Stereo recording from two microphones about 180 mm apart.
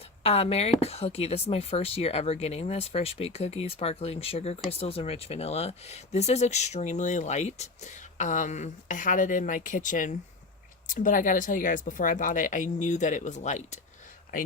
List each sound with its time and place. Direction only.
0.2 s speech: 35° left (ahead or behind)